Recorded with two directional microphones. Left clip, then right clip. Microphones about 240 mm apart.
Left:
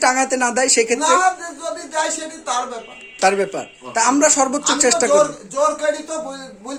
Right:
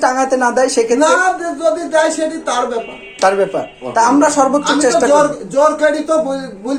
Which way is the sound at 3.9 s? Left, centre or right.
Left.